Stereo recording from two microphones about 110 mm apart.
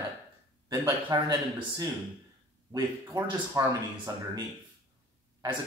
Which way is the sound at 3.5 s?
35° right (ahead or behind).